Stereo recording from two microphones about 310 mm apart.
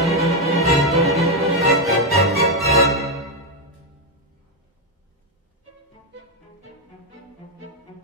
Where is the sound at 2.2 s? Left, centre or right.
Centre.